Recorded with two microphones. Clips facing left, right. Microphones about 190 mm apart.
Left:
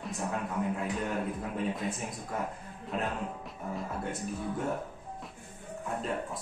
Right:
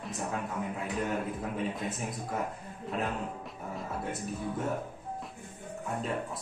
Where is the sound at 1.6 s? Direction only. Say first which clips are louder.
Left 3 dB; centre (ahead or behind).